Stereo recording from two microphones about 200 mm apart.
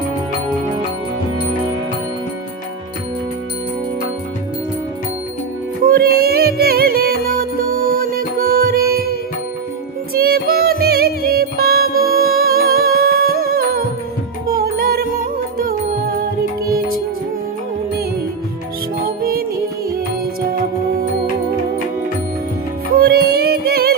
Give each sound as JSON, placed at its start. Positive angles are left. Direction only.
{"t": 5.8, "sound": "music", "side_deg": -50}
{"t": 10.2, "sound": "music", "side_deg": -50}
{"t": 19.0, "sound": "music", "side_deg": -50}
{"t": 23.0, "sound": "music", "side_deg": -55}